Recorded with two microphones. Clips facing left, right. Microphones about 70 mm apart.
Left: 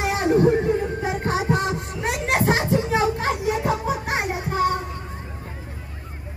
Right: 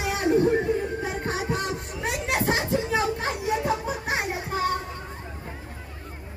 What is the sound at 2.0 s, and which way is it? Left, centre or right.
Children playing, left.